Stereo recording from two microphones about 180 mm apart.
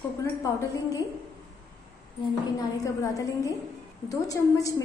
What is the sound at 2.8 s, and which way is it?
A woman's voice, 20° left (ahead or behind).